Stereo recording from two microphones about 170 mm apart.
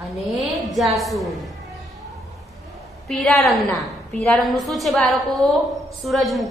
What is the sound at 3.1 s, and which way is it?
A woman's voice, 10° left (ahead or behind).